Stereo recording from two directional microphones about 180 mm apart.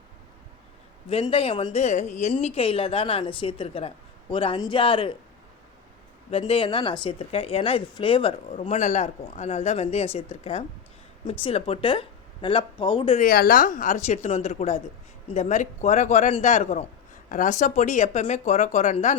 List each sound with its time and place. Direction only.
1.1 s a woman's voice: 30° left (ahead or behind)
6.3 s speech: 30° left (ahead or behind)
8.6 s a woman's voice: 40° left (ahead or behind)
13.1 s a woman's voice: 55° left (ahead or behind)